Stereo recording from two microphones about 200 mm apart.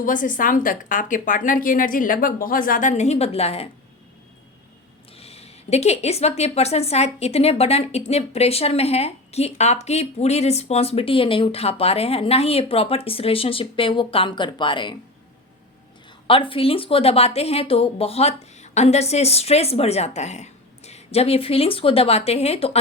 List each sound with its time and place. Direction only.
0.0 s a woman's voice: 40° left (ahead or behind)
5.1 s speech: 30° left (ahead or behind)
16.2 s speech: 25° left (ahead or behind)